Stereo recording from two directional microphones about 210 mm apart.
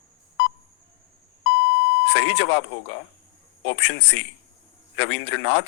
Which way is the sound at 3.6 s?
55° left (ahead or behind).